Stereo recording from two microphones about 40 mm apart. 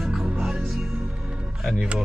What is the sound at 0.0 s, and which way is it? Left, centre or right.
Music, centre.